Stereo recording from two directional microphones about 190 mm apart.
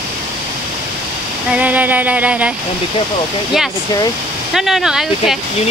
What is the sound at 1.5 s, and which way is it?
Music, 10° right (ahead or behind).